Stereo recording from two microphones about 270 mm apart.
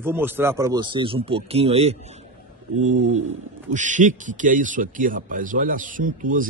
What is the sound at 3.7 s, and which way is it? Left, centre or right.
Speech, right.